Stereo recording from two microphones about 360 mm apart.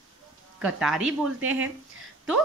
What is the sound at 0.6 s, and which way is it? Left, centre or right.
Speech, centre.